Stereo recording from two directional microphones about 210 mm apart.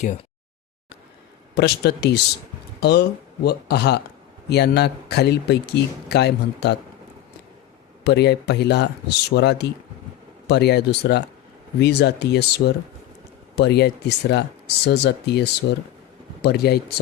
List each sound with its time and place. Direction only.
1.5 s speech: 50° left (ahead or behind)
8.0 s speech: 50° left (ahead or behind)